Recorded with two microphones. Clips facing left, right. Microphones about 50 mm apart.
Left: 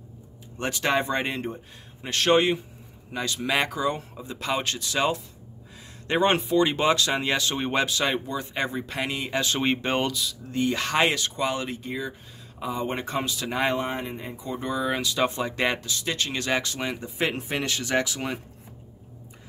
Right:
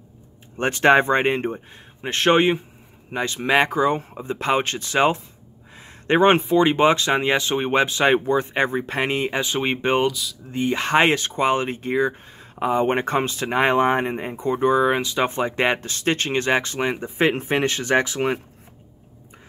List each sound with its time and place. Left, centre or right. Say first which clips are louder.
0.6 s speech: right 9 dB; right
9.3 s speech: right 2 dB; centre; by 11.9 s right
11.9 s speech: right 15 dB; right
12.3 s speech: right 9 dB; right
15.9 s speech: right 6 dB; right